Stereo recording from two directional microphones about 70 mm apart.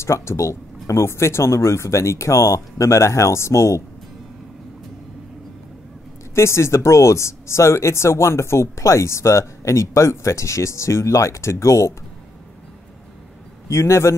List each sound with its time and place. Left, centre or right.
0.0 s speech: left
6.3 s speech: left
13.7 s speech: left